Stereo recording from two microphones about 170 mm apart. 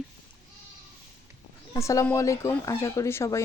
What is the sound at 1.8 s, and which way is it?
Speech, 15° left (ahead or behind).